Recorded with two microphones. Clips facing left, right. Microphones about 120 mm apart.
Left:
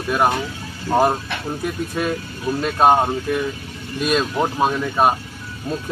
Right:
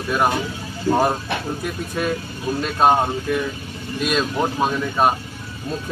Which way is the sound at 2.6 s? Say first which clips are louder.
Left 2 dB; 15° left (ahead or behind).